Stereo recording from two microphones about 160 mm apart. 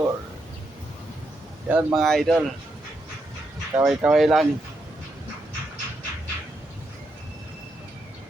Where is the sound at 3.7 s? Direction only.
5° right (ahead or behind).